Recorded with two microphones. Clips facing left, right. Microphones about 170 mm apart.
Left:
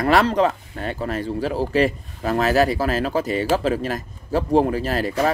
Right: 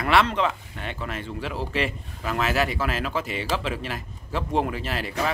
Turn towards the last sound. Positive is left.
turn(degrees=40)  # may be behind; listen again after turning